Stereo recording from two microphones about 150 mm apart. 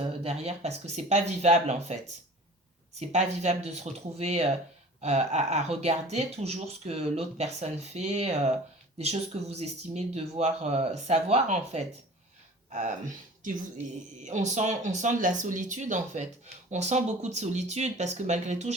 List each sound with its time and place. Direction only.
0.0 s speech: 40° right (ahead or behind)
3.0 s speech: 50° right (ahead or behind)